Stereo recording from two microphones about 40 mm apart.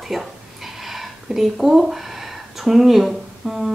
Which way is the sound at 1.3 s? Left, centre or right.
Centre.